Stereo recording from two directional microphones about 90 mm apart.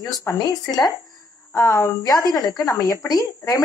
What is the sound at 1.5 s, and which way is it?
Speech, 35° left (ahead or behind).